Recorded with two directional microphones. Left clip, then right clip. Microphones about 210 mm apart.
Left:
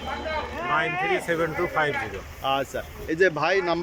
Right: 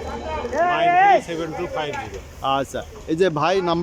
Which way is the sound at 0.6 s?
45° right (ahead or behind).